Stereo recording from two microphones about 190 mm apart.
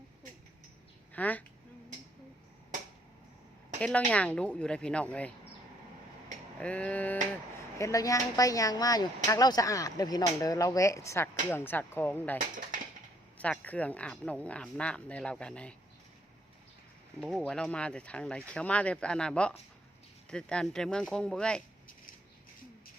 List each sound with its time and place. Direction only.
1.1 s a woman's voice: 10° left (ahead or behind)
3.8 s a woman's voice: 5° left (ahead or behind)
6.6 s speech: 5° left (ahead or behind)
13.4 s speech: 5° left (ahead or behind)
17.2 s speech: centre (ahead or behind)